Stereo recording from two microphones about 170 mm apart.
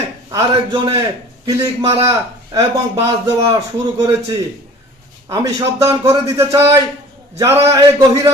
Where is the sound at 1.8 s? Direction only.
35° right (ahead or behind).